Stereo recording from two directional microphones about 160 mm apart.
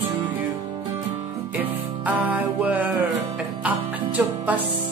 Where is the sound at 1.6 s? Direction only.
10° right (ahead or behind).